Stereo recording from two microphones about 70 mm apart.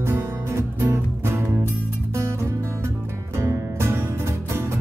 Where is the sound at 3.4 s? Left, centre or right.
Right.